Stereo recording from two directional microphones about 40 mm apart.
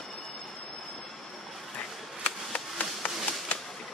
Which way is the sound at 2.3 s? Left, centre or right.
Left.